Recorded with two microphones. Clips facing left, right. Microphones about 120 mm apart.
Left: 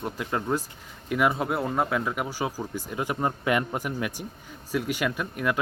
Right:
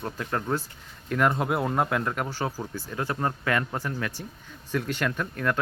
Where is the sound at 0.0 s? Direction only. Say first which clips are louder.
Left 1 dB; 10° left (ahead or behind).